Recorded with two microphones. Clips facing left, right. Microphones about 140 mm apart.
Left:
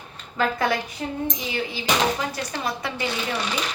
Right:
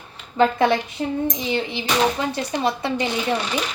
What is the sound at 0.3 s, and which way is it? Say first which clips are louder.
A woman's voice: right 6 dB; 25° right (ahead or behind).